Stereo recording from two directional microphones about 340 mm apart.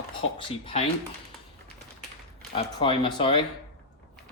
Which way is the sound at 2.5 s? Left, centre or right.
Centre.